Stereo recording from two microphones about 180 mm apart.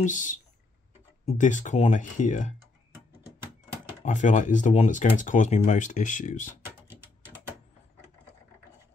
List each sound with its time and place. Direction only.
0.0 s speech: 45° left (ahead or behind)
4.0 s speech: 40° left (ahead or behind)